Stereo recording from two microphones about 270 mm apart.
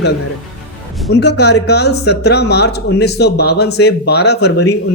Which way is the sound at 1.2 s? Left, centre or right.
Left.